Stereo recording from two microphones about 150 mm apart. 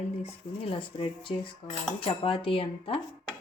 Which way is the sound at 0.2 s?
35° left (ahead or behind).